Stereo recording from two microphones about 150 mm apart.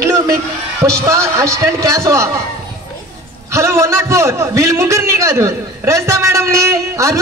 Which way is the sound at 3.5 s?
20° right (ahead or behind).